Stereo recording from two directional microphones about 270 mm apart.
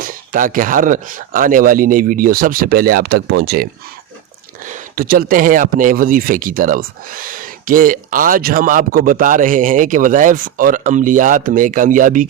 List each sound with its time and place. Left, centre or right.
0.0 s speech: right